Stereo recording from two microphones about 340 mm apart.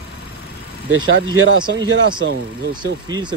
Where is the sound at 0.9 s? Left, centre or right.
Right.